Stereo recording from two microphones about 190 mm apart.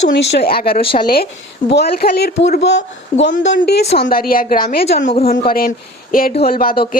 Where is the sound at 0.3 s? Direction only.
55° left (ahead or behind).